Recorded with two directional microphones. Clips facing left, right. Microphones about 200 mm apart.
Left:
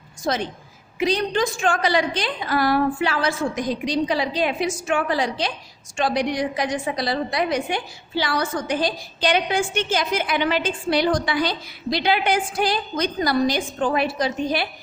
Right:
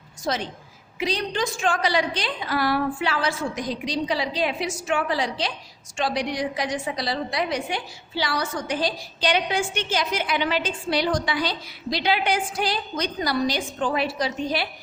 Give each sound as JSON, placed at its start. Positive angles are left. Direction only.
{"t": 0.9, "sound": "a woman's voice", "side_deg": 50}